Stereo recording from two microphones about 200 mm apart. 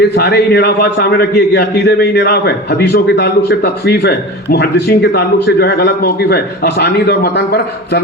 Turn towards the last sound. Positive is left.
turn(degrees=55)  # may be behind; listen again after turning